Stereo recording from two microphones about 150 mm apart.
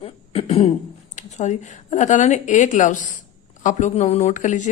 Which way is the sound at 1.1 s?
50° left (ahead or behind).